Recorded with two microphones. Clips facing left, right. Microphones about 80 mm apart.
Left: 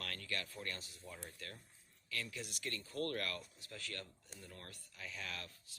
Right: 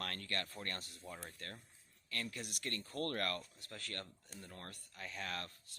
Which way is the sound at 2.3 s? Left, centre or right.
Right.